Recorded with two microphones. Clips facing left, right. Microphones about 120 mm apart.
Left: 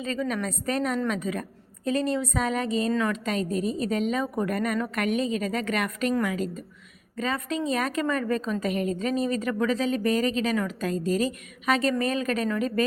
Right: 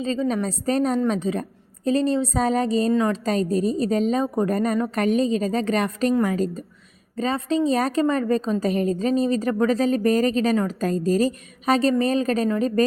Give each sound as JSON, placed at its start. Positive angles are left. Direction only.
{"t": 0.0, "sound": "a woman's voice", "side_deg": -30}